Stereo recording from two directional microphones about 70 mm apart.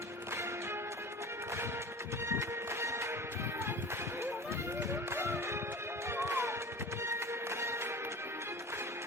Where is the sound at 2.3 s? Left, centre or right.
Right.